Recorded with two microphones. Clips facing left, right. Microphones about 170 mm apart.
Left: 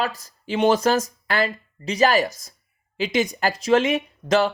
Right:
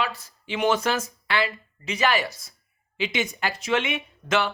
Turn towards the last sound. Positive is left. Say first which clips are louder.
# left 5 dB
turn(degrees=40)  # may be behind; listen again after turning